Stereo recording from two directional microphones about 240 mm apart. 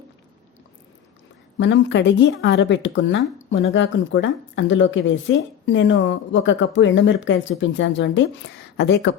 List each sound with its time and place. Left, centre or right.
1.5 s speech: left